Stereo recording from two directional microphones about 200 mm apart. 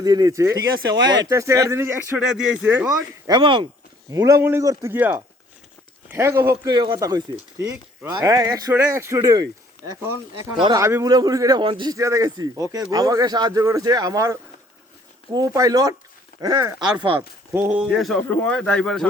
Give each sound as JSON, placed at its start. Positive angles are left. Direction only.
{"t": 0.0, "sound": "a man's voice", "side_deg": -20}
{"t": 3.3, "sound": "a man's voice", "side_deg": -25}
{"t": 17.2, "sound": "speech", "side_deg": -10}